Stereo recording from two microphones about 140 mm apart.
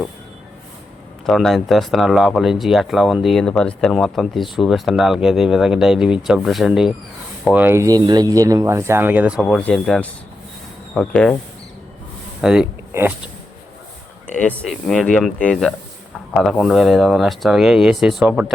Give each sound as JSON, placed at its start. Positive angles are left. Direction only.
{"t": 1.3, "sound": "speech", "side_deg": 0}
{"t": 7.5, "sound": "speech", "side_deg": -15}
{"t": 9.4, "sound": "speech", "side_deg": 5}
{"t": 12.4, "sound": "speech", "side_deg": -5}
{"t": 14.3, "sound": "speech", "side_deg": 10}